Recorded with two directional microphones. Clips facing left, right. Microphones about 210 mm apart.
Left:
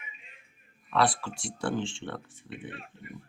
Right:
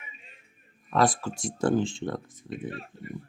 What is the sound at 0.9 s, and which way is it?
Speech, 45° right (ahead or behind).